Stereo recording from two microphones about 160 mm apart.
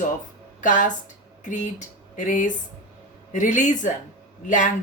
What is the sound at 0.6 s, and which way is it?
Speech, 55° left (ahead or behind).